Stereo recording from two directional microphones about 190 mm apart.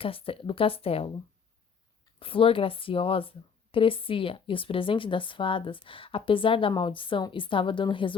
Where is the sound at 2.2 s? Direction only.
30° left (ahead or behind).